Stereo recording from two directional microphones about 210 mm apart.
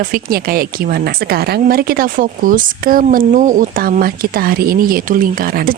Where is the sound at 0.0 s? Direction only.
45° right (ahead or behind).